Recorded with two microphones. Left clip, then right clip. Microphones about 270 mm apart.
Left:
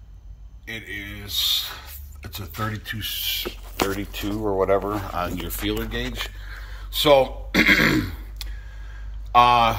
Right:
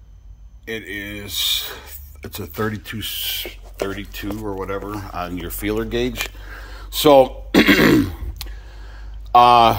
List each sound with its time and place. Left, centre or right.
0.9 s speech: right
4.0 s speech: centre
5.8 s speech: right
8.4 s a sound: right
9.3 s speech: right